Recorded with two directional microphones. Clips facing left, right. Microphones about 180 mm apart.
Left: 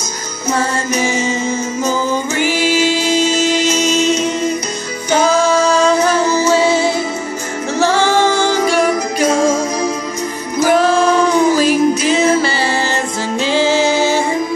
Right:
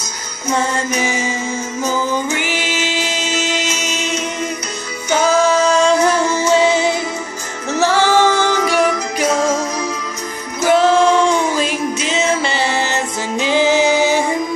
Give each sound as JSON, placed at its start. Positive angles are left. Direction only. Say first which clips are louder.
{"t": 0.6, "sound": "music", "louder": "left 1 dB", "side_deg": -15}
{"t": 2.3, "sound": "music", "louder": "left 6 dB", "side_deg": -20}
{"t": 5.2, "sound": "music", "louder": "even", "side_deg": 10}
{"t": 6.5, "sound": "music", "louder": "right 2 dB", "side_deg": -20}
{"t": 7.8, "sound": "music", "louder": "even", "side_deg": 15}
{"t": 8.6, "sound": "music", "louder": "left 2 dB", "side_deg": -15}
{"t": 10.6, "sound": "music", "louder": "even", "side_deg": -20}